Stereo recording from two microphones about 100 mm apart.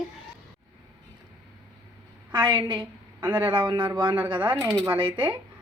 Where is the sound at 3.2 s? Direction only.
15° right (ahead or behind).